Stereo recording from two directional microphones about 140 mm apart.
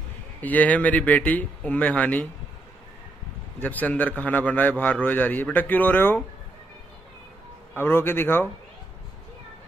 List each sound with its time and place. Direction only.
0.4 s speech: 10° left (ahead or behind)
3.6 s speech: 10° left (ahead or behind)
7.7 s speech: 15° left (ahead or behind)